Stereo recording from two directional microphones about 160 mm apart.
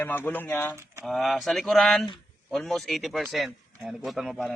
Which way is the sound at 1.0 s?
Centre (ahead or behind).